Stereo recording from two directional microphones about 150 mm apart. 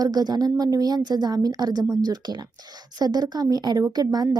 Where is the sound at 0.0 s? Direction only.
25° right (ahead or behind).